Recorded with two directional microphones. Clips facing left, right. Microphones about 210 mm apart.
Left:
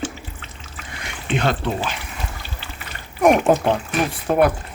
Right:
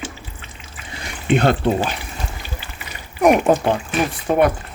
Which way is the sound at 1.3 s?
50° right (ahead or behind).